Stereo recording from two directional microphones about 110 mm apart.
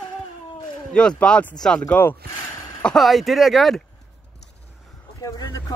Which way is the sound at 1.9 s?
20° left (ahead or behind).